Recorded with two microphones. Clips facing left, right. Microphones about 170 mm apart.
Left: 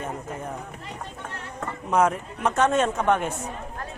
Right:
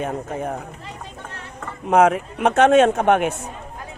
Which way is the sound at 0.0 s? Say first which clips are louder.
Right 7 dB; 65° right (ahead or behind).